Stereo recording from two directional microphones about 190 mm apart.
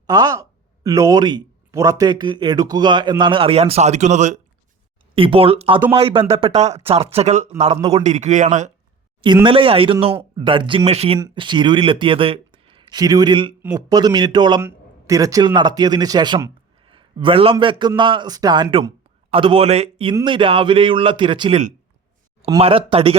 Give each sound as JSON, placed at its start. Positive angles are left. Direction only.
{"t": 0.1, "sound": "speech", "side_deg": -20}
{"t": 9.2, "sound": "speech", "side_deg": -25}